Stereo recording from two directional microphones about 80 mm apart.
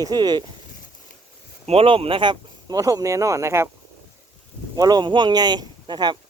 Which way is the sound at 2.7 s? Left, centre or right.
Right.